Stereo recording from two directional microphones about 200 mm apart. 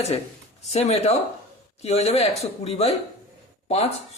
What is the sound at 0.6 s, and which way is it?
Speech, 35° left (ahead or behind).